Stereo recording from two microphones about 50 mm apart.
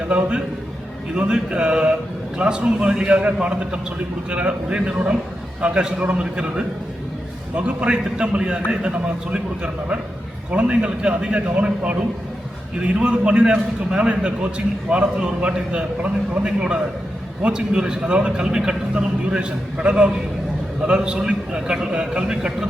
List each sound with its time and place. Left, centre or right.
0.1 s a man's voice: right